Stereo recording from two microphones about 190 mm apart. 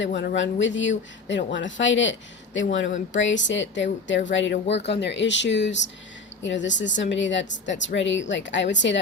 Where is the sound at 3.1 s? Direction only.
75° left (ahead or behind).